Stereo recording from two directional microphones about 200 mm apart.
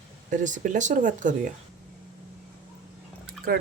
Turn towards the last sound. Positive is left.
turn(degrees=-50)  # may be behind; listen again after turning